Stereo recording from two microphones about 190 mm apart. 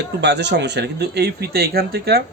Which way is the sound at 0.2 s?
65° right (ahead or behind).